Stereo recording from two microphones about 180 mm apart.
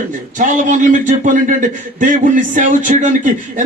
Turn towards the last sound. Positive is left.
turn(degrees=-45)  # may be behind; listen again after turning